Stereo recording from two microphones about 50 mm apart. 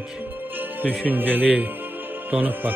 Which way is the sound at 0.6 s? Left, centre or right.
Right.